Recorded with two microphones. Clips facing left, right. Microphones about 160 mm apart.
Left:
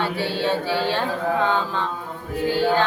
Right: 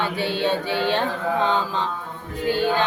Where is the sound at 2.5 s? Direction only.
20° right (ahead or behind).